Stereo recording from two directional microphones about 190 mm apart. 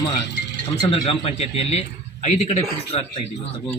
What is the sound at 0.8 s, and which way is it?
Speech, 25° left (ahead or behind).